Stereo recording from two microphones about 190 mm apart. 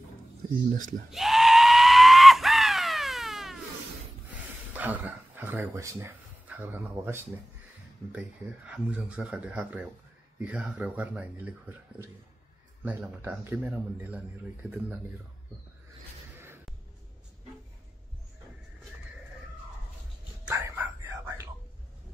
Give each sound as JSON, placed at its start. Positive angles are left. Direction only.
{"t": 0.7, "sound": "speech", "side_deg": -45}
{"t": 1.1, "sound": "a sound", "side_deg": 0}
{"t": 4.7, "sound": "speech", "side_deg": -10}
{"t": 12.8, "sound": "speech", "side_deg": -5}
{"t": 20.4, "sound": "whispering", "side_deg": -15}